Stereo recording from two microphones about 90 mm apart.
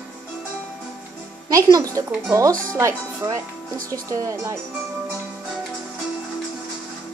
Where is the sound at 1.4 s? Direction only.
40° right (ahead or behind).